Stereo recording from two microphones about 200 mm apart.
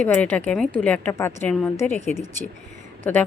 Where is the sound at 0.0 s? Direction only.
5° left (ahead or behind).